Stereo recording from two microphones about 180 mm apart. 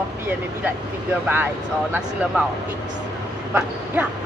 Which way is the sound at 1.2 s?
10° right (ahead or behind).